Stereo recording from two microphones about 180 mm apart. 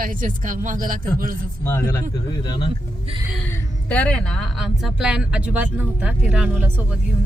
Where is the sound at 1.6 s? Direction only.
10° left (ahead or behind).